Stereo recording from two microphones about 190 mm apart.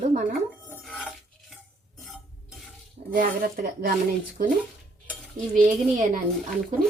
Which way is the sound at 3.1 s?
50° right (ahead or behind).